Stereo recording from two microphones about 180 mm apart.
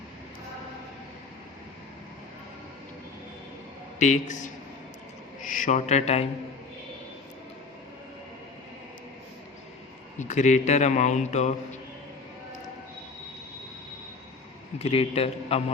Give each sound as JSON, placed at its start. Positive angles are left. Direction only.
{"t": 4.0, "sound": "a man's voice", "side_deg": 40}
{"t": 5.5, "sound": "a man's voice", "side_deg": 45}
{"t": 10.2, "sound": "a man's voice", "side_deg": 40}
{"t": 14.8, "sound": "a man's voice", "side_deg": 35}